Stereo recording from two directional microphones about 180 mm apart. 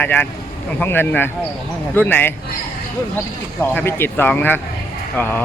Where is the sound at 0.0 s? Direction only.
10° left (ahead or behind).